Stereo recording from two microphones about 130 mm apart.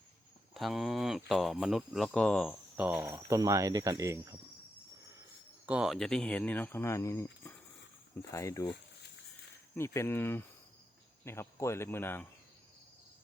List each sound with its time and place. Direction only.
0.5 s speech: centre (ahead or behind)
2.7 s speech: 15° right (ahead or behind)
5.6 s speech: 5° right (ahead or behind); by 8.7 s 25° left (ahead or behind)
9.7 s speech: 20° left (ahead or behind)